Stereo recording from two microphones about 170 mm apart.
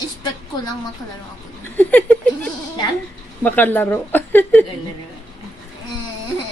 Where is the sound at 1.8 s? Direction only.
10° left (ahead or behind).